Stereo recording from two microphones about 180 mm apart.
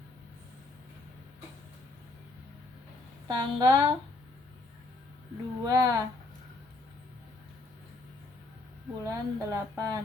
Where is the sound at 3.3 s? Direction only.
25° right (ahead or behind).